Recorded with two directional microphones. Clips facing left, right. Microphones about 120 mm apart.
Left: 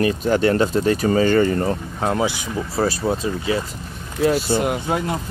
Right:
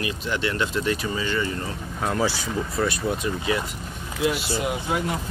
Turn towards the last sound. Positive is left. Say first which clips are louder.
# left 5 dB
turn(degrees=55)  # may be behind; listen again after turning